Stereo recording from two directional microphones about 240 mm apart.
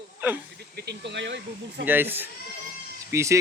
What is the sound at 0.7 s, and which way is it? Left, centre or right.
Speech, right.